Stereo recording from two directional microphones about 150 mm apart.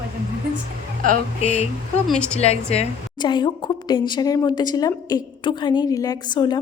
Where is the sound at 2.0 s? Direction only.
5° left (ahead or behind).